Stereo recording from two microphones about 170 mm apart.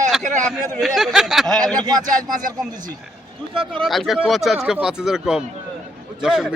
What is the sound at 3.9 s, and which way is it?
A man's voice, centre (ahead or behind).